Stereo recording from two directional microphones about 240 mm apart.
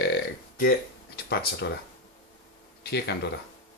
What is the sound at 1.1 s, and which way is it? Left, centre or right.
Speech, left.